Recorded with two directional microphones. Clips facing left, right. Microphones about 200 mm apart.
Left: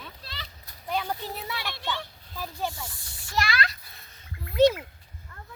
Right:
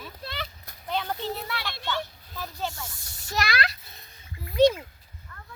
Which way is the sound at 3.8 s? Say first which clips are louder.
Right 2 dB; 20° right (ahead or behind).